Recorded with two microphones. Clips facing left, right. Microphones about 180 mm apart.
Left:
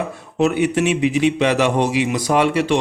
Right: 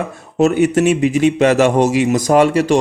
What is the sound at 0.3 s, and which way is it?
A man's voice, 45° right (ahead or behind).